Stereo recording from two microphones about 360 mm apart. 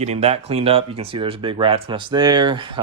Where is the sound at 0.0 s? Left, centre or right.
Centre.